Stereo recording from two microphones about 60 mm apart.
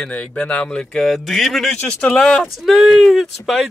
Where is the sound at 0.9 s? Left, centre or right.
Centre.